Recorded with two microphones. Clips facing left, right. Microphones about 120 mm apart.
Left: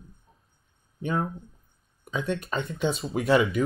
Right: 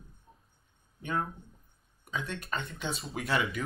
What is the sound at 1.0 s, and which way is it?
Speech, 25° left (ahead or behind).